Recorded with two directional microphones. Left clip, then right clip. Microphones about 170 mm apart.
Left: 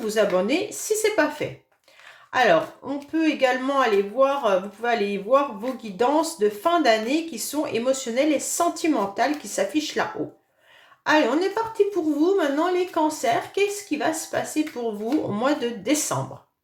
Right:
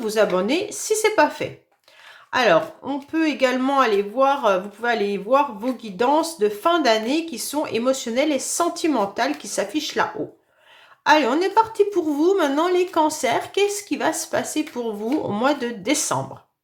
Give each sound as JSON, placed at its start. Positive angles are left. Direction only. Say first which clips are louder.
{"t": 0.0, "sound": "speech", "louder": "right 2 dB", "side_deg": -25}
{"t": 11.9, "sound": "a woman's voice", "louder": "right 2 dB", "side_deg": -35}